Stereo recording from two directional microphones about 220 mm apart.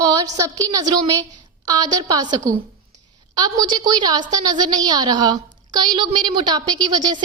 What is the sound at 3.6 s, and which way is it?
A woman's voice, 20° right (ahead or behind).